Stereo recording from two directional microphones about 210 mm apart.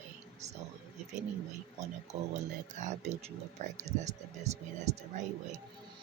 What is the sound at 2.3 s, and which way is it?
Speech, 35° right (ahead or behind).